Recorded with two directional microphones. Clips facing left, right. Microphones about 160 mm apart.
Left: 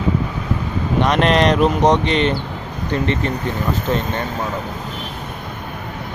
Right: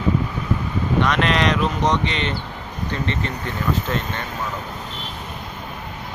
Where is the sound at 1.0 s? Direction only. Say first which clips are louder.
Left 7 dB; 40° left (ahead or behind).